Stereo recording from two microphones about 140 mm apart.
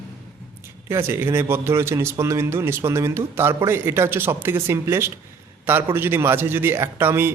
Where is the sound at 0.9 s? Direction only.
15° right (ahead or behind).